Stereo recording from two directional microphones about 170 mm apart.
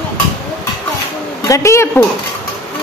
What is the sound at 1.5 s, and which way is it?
Speech, 15° left (ahead or behind).